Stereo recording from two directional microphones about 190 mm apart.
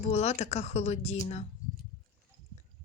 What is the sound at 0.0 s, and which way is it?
Speech, 35° left (ahead or behind).